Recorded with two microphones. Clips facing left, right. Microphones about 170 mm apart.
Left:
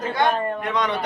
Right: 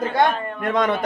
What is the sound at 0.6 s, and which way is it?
Speech, 50° right (ahead or behind).